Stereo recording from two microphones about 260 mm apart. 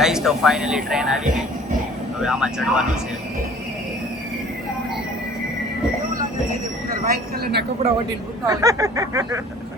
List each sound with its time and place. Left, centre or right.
0.0 s speech: centre
7.0 s speech: right
8.4 s a sound: centre